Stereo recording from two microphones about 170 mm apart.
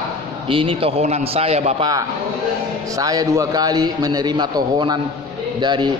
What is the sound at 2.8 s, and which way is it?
A man's voice, 20° right (ahead or behind).